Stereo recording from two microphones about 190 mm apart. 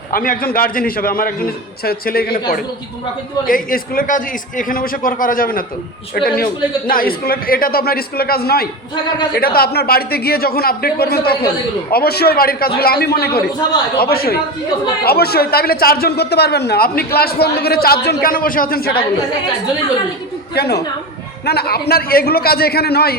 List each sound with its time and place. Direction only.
0.1 s a man's voice: 50° left (ahead or behind)
20.6 s a man's voice: 60° left (ahead or behind)